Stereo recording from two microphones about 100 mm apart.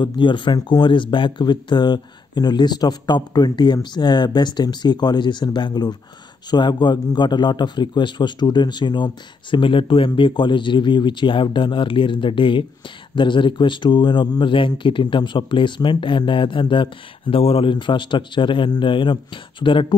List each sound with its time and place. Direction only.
0.0 s a man's voice: 55° left (ahead or behind)